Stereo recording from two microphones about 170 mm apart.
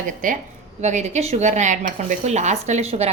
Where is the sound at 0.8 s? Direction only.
40° right (ahead or behind).